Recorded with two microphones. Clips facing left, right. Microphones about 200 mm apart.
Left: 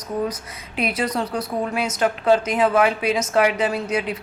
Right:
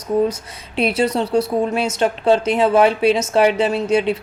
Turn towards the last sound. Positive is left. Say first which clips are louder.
# right 6 dB
turn(degrees=-30)  # may be behind; listen again after turning